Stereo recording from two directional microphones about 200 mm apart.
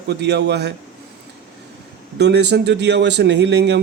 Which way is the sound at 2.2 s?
55° right (ahead or behind).